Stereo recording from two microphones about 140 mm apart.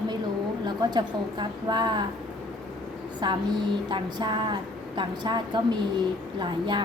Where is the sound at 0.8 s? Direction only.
30° right (ahead or behind).